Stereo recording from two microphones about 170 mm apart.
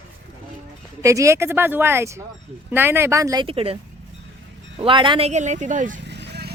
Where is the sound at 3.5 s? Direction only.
35° right (ahead or behind).